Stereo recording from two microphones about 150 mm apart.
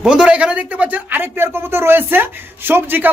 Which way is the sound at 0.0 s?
5° right (ahead or behind).